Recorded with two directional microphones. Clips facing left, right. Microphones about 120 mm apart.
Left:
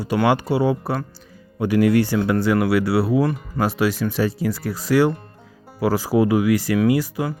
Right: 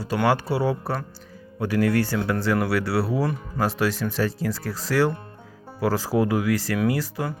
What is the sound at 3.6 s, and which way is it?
Speech, 10° left (ahead or behind).